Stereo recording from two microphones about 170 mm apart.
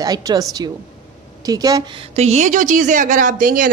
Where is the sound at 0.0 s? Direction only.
20° right (ahead or behind).